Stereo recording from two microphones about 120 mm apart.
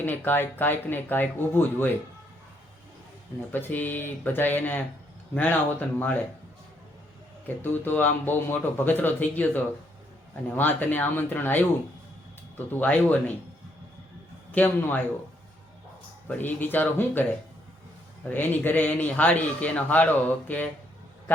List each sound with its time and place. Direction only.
0.0 s a man's voice: 15° left (ahead or behind)
3.5 s a man's voice: 15° left (ahead or behind)
7.4 s a man's voice: 15° left (ahead or behind)
14.5 s a man's voice: 15° left (ahead or behind)
16.3 s a man's voice: 15° left (ahead or behind)
18.3 s a man's voice: 15° left (ahead or behind)